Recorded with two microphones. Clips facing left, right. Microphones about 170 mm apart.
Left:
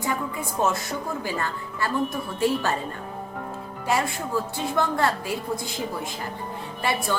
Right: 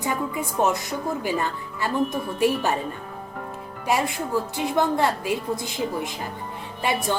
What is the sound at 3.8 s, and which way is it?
A woman's voice, 15° right (ahead or behind).